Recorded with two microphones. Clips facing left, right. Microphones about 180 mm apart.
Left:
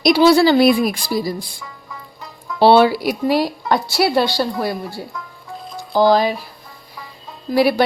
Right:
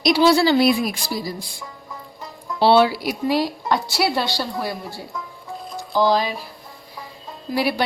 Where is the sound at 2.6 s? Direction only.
50° left (ahead or behind).